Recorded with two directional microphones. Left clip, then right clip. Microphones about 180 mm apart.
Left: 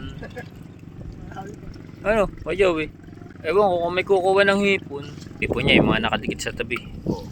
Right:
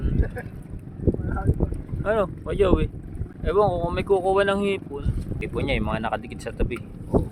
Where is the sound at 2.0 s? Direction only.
20° left (ahead or behind).